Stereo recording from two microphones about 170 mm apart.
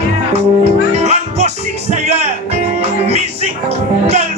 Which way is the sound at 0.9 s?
40° right (ahead or behind).